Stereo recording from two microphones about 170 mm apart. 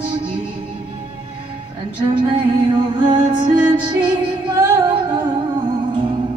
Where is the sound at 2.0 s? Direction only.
30° right (ahead or behind).